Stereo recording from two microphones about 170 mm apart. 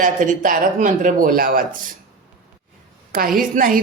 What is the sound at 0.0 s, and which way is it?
Speech, 50° right (ahead or behind).